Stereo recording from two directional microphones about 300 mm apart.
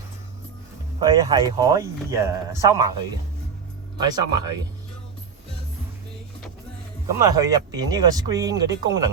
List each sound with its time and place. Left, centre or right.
0.9 s speech: centre
3.9 s speech: centre
7.1 s speech: centre